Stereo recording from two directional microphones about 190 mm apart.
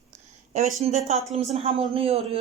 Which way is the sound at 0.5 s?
40° right (ahead or behind).